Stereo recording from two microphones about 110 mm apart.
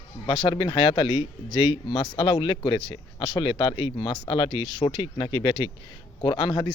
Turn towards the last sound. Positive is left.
turn(degrees=45)  # may be behind; listen again after turning